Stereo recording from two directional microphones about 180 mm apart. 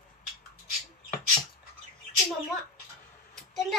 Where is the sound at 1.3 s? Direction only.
40° left (ahead or behind).